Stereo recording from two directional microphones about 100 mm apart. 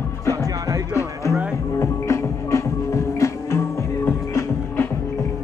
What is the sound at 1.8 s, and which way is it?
Music, 30° left (ahead or behind).